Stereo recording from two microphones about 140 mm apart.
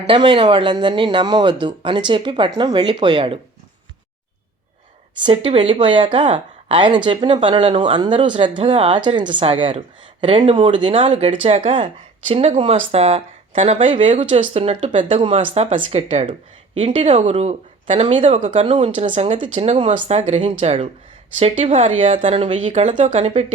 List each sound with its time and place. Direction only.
0.1 s speech: 35° right (ahead or behind)
5.2 s speech: 40° right (ahead or behind)
12.3 s speech: 45° right (ahead or behind)
15.2 s a woman's voice: 40° right (ahead or behind)